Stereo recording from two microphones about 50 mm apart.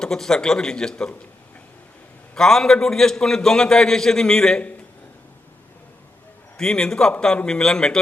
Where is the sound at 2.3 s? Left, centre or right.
Centre.